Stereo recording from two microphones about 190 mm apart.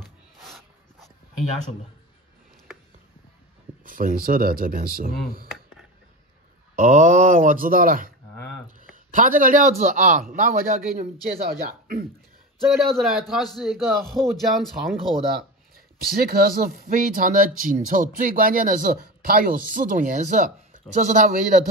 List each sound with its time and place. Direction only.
0.0 s a sound: centre (ahead or behind)
3.8 s speech: 45° right (ahead or behind)
6.7 s speech: 40° right (ahead or behind)
12.8 s a man's voice: centre (ahead or behind)
15.7 s speech: 55° right (ahead or behind)